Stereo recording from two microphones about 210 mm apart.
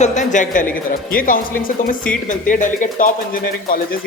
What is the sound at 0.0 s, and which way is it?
A woman's voice, 35° left (ahead or behind).